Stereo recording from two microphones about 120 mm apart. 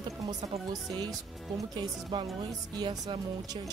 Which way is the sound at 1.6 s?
30° right (ahead or behind).